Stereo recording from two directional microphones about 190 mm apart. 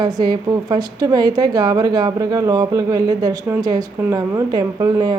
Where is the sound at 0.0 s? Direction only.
20° right (ahead or behind).